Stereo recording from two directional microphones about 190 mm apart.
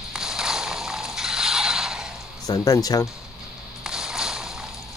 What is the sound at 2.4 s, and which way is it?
Speech, 20° left (ahead or behind).